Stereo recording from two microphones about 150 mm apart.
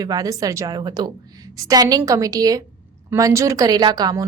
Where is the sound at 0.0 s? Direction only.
25° right (ahead or behind).